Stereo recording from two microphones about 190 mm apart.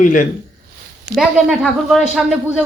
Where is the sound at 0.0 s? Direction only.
45° left (ahead or behind).